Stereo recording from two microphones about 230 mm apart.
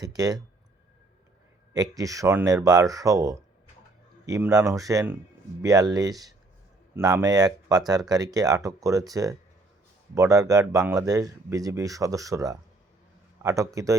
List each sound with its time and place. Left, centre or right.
0.0 s speech: centre
1.7 s speech: centre